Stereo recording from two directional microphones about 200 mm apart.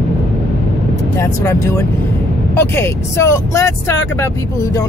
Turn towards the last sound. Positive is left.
turn(degrees=15)  # may be behind; listen again after turning